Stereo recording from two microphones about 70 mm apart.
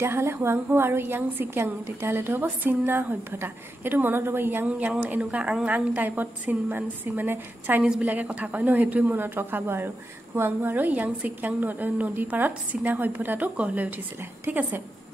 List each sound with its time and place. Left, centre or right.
0.0 s a woman's voice: right
4.6 s a woman's voice: right